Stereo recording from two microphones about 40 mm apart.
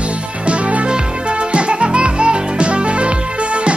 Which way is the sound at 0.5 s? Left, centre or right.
Right.